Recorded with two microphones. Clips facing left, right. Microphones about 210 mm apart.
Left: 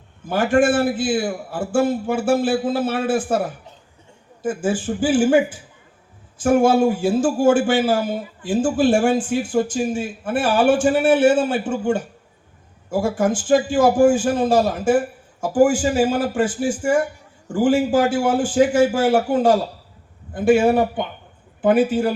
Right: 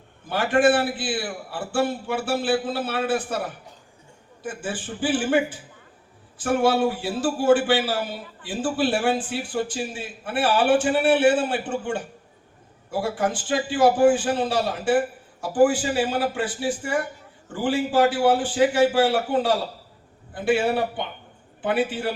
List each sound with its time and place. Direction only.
0.3 s a man's voice: 45° left (ahead or behind)
4.4 s a man's voice: 45° left (ahead or behind)
6.4 s a man's voice: 45° left (ahead or behind)